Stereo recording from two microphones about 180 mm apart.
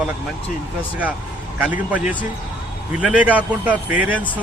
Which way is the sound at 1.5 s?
10° right (ahead or behind).